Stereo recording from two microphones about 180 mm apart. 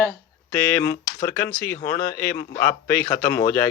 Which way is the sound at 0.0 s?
10° left (ahead or behind).